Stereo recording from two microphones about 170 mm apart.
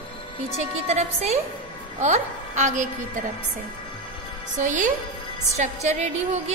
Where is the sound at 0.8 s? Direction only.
40° right (ahead or behind).